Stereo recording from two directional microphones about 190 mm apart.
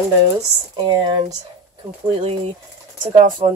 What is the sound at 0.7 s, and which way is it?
Speech, 20° right (ahead or behind).